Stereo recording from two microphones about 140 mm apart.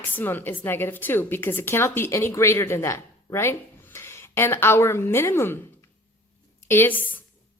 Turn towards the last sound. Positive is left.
turn(degrees=15)  # may be behind; listen again after turning